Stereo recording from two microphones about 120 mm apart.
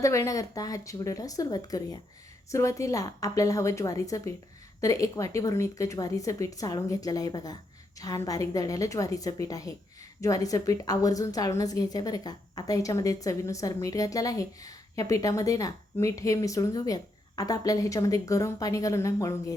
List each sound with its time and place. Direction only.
0.0 s a woman's voice: 25° left (ahead or behind)